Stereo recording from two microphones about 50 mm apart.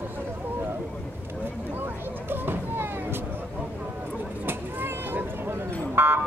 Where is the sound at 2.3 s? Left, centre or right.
Right.